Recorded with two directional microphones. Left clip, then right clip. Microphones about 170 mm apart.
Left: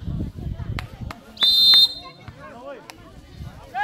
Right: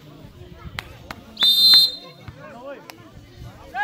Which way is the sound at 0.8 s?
25° right (ahead or behind).